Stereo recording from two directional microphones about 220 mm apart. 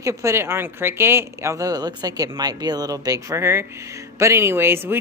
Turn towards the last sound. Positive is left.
turn(degrees=-10)  # may be behind; listen again after turning